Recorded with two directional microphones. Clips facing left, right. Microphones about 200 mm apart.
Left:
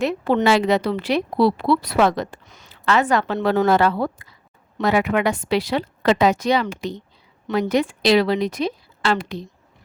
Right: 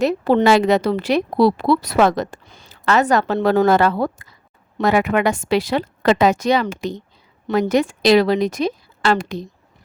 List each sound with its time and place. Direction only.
0.0 s a woman's voice: 40° right (ahead or behind)
2.5 s a sound: 30° right (ahead or behind)
2.8 s a woman's voice: 40° right (ahead or behind)